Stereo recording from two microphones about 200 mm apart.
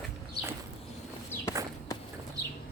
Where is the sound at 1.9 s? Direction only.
15° left (ahead or behind).